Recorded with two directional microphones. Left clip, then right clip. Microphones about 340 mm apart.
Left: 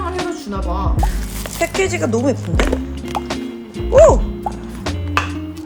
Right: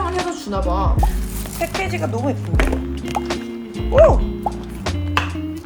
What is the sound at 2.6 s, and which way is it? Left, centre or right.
Music, centre.